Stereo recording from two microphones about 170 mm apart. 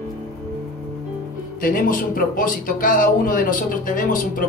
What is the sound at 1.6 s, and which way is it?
Speech, 55° left (ahead or behind).